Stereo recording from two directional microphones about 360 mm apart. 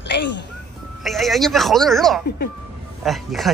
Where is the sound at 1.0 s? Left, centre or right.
Centre.